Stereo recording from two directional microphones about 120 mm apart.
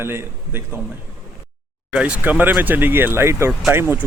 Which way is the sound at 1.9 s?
10° right (ahead or behind).